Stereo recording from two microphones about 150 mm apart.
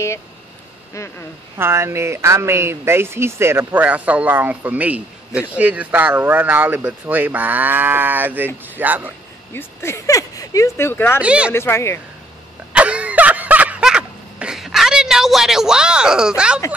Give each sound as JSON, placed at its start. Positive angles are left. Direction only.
{"t": 1.6, "sound": "speech", "side_deg": -15}
{"t": 9.5, "sound": "speech", "side_deg": 15}
{"t": 11.1, "sound": "speech", "side_deg": -5}
{"t": 11.5, "sound": "speech", "side_deg": 15}
{"t": 12.7, "sound": "a sound", "side_deg": -10}